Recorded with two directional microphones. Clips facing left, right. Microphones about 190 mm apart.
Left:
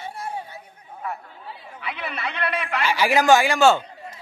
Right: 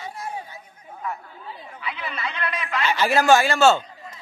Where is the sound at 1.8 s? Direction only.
60° left (ahead or behind).